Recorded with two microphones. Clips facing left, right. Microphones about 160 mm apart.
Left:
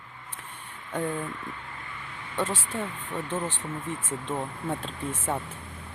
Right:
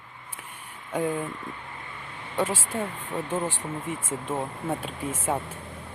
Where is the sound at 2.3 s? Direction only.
10° right (ahead or behind).